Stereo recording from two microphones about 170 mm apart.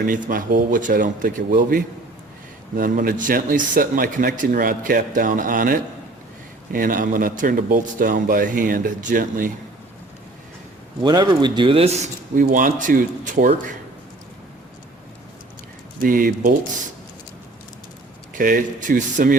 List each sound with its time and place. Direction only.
0.1 s speech: 50° right (ahead or behind)
11.0 s speech: 25° right (ahead or behind); by 13.5 s 50° right (ahead or behind)
16.0 s speech: 55° right (ahead or behind)
18.3 s speech: 55° right (ahead or behind)